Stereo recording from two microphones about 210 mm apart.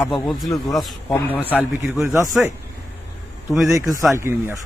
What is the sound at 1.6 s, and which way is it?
Speech, 10° right (ahead or behind).